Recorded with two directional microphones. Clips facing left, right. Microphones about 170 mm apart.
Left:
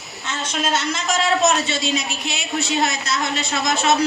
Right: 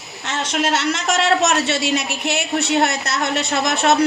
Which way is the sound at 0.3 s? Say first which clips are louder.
Right 3 dB; 75° right (ahead or behind).